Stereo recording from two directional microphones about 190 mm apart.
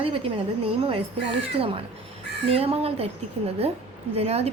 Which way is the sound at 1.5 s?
30° right (ahead or behind).